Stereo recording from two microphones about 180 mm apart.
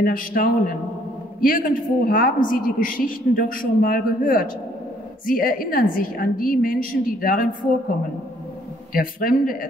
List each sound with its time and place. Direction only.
0.0 s a woman's voice: 50° left (ahead or behind)
8.9 s a woman's voice: 55° left (ahead or behind)